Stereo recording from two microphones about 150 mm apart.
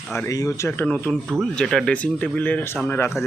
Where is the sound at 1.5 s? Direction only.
5° left (ahead or behind).